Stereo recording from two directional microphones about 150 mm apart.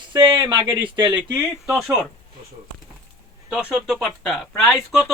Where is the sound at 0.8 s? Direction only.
30° right (ahead or behind).